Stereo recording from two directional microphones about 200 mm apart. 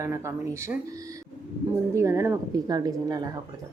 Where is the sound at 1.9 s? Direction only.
15° right (ahead or behind).